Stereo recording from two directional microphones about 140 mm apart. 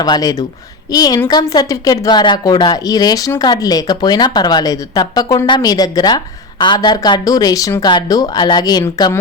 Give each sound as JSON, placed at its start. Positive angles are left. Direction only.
{"t": 0.0, "sound": "speech", "side_deg": 25}